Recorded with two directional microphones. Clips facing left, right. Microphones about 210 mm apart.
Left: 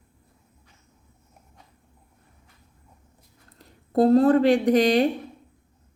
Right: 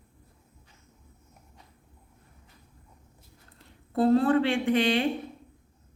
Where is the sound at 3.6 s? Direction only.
40° left (ahead or behind).